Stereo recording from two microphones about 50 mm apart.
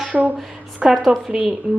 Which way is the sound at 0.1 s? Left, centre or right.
Right.